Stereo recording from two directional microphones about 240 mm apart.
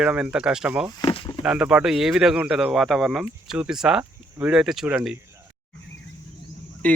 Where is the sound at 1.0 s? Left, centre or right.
Left.